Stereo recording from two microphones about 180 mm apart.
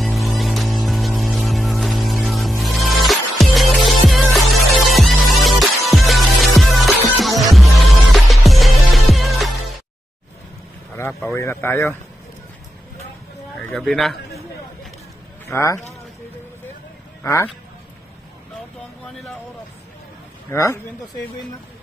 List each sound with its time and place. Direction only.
0.0 s music: centre (ahead or behind)
11.0 s a sound: 15° left (ahead or behind)
11.3 s speech: 15° left (ahead or behind)
13.7 s speech: centre (ahead or behind)
15.5 s speech: 15° left (ahead or behind)
17.2 s speech: 15° left (ahead or behind)
20.4 s speech: 15° left (ahead or behind)